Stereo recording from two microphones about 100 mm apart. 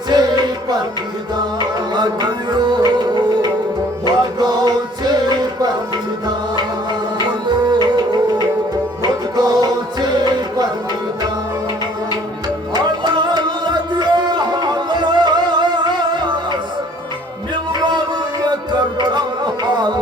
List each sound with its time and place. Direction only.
0.1 s music: 45° right (ahead or behind)
7.7 s music: 45° right (ahead or behind)
12.7 s music: 45° right (ahead or behind)